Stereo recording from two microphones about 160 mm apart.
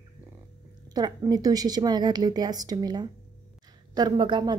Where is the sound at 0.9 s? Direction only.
25° right (ahead or behind).